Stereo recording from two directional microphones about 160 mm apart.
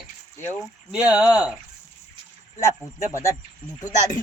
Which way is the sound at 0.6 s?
5° right (ahead or behind).